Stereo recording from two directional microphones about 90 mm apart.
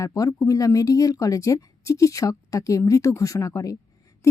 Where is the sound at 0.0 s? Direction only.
40° left (ahead or behind).